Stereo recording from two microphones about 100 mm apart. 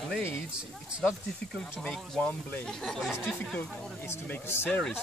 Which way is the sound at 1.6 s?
10° left (ahead or behind).